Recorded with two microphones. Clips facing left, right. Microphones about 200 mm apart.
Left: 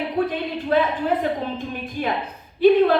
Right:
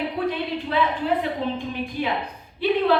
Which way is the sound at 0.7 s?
45° left (ahead or behind).